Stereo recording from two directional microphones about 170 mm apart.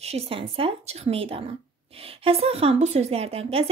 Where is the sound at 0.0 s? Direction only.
35° right (ahead or behind).